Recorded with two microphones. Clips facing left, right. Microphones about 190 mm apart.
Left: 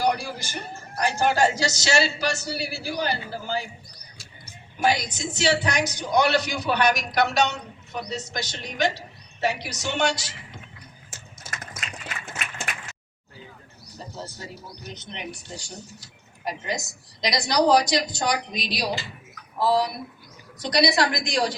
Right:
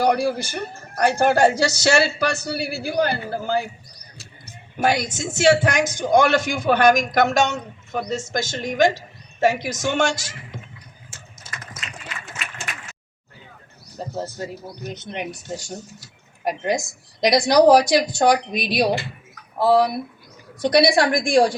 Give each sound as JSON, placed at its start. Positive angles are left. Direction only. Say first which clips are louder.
{"t": 0.0, "sound": "a man's voice", "louder": "right 6 dB", "side_deg": -55}
{"t": 4.8, "sound": "a man's voice", "louder": "right 3 dB", "side_deg": -50}
{"t": 14.1, "sound": "a man's voice", "louder": "right 9 dB", "side_deg": -55}